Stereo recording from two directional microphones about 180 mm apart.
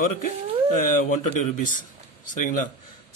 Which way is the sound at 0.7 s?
45° left (ahead or behind).